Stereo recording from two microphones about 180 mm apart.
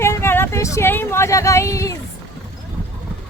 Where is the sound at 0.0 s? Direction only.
15° left (ahead or behind).